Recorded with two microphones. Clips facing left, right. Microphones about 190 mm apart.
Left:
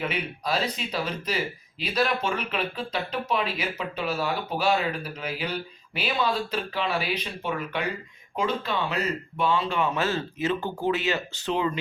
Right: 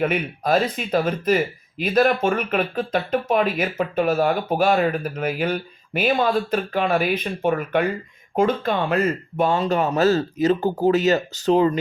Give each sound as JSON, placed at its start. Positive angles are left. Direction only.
{"t": 0.0, "sound": "speech", "side_deg": -50}